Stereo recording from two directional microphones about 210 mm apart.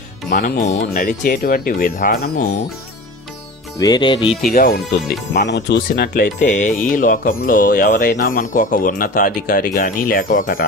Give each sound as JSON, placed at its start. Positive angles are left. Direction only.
{"t": 0.3, "sound": "speech", "side_deg": 40}
{"t": 3.8, "sound": "music", "side_deg": 20}
{"t": 4.5, "sound": "speech", "side_deg": 45}